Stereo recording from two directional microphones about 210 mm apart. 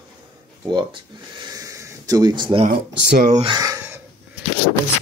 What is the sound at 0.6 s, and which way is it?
Speech, 20° right (ahead or behind).